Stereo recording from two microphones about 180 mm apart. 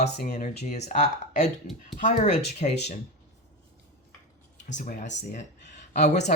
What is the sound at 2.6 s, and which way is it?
Speech, 45° left (ahead or behind).